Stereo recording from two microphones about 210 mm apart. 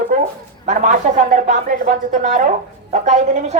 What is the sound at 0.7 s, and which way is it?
A woman's voice, 40° right (ahead or behind).